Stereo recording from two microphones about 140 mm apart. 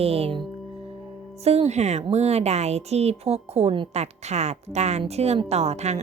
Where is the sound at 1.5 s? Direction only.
50° right (ahead or behind).